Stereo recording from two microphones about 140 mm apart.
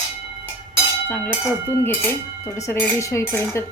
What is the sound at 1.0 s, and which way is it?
A woman's voice, 10° left (ahead or behind).